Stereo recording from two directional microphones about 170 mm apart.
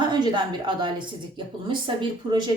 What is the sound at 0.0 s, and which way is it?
A woman's voice, 25° right (ahead or behind).